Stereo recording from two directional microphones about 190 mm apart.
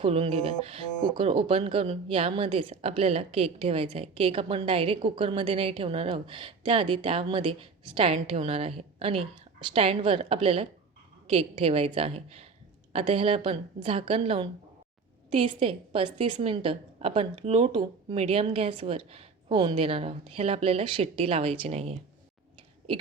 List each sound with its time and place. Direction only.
0.0 s a woman's voice: 30° right (ahead or behind)